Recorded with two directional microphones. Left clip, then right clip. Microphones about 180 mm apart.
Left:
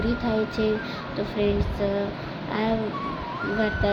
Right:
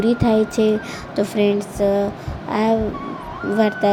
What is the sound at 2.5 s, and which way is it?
Speech, 35° right (ahead or behind).